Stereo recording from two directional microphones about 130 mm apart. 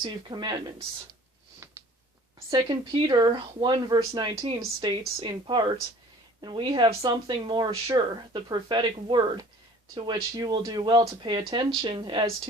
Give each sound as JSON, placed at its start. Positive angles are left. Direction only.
{"t": 0.0, "sound": "speech", "side_deg": -35}
{"t": 1.6, "sound": "a sound", "side_deg": -20}
{"t": 2.5, "sound": "speech", "side_deg": -35}